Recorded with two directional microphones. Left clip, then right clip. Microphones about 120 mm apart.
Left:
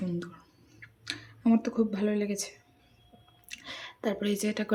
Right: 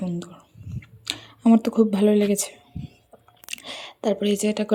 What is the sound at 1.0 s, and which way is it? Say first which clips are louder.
Speech: right 8 dB; 45° right (ahead or behind).